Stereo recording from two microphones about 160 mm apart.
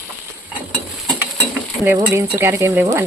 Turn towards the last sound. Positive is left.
turn(degrees=-15)  # may be behind; listen again after turning